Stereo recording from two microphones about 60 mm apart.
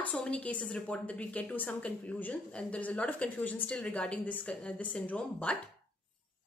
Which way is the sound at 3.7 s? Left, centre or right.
Centre.